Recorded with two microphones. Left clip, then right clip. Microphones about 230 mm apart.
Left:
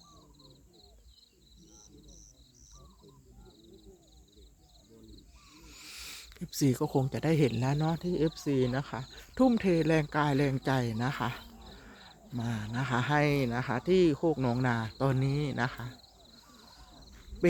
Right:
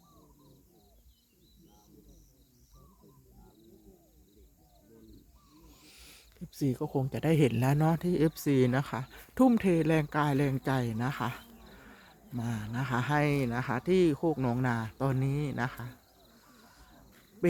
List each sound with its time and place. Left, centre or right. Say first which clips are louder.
5.5 s a sound: left 9 dB; left
7.1 s speech: right 1 dB; centre
17.4 s duck: left 2 dB; centre